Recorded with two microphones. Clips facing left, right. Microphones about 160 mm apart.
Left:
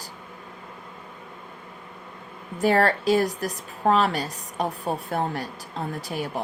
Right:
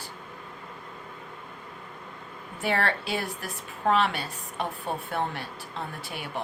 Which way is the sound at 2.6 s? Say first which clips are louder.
Left 7 dB; 40° left (ahead or behind).